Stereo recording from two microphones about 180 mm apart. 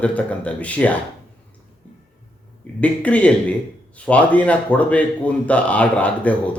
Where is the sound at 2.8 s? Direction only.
5° left (ahead or behind).